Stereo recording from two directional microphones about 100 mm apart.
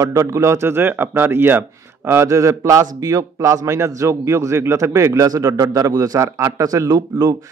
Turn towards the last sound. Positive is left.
turn(degrees=-45)  # may be behind; listen again after turning